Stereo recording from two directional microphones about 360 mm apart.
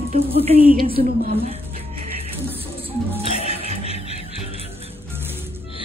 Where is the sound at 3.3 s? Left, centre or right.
Centre.